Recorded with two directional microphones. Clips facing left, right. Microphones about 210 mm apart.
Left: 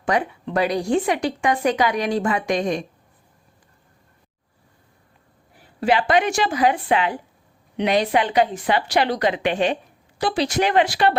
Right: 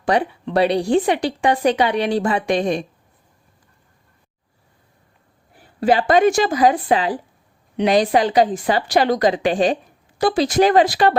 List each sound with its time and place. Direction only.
0.0 s a woman's voice: 30° right (ahead or behind)
5.8 s a woman's voice: 40° right (ahead or behind)